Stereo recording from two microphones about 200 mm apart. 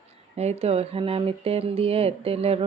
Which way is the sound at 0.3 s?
30° right (ahead or behind).